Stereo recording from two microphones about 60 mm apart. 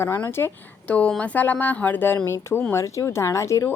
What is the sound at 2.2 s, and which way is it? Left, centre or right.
Speech, left.